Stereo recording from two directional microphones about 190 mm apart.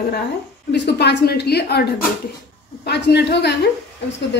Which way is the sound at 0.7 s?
60° left (ahead or behind).